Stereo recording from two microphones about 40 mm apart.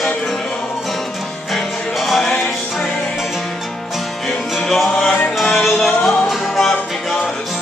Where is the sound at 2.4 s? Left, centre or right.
Centre.